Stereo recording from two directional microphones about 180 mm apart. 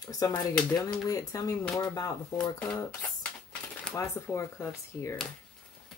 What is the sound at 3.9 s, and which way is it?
Speech, 15° left (ahead or behind).